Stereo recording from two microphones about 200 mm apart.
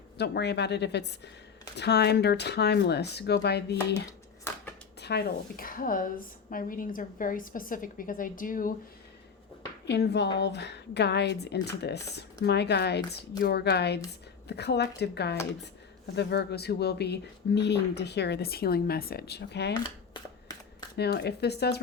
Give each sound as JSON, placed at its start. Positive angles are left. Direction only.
{"t": 0.2, "sound": "speech", "side_deg": 55}
{"t": 4.9, "sound": "a woman's voice", "side_deg": 55}
{"t": 9.8, "sound": "speech", "side_deg": 55}
{"t": 19.7, "sound": "a sound", "side_deg": 20}
{"t": 20.9, "sound": "speech", "side_deg": 55}